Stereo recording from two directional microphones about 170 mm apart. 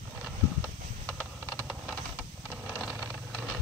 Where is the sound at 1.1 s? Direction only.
15° right (ahead or behind).